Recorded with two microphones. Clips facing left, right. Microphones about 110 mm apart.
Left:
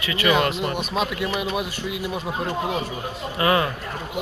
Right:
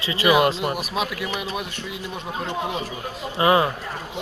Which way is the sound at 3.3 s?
25° right (ahead or behind).